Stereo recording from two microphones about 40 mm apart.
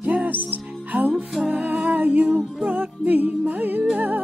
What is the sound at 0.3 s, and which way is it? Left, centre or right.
Music, right.